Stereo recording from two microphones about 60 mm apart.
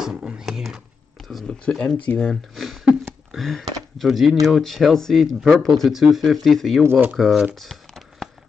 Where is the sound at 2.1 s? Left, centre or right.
Left.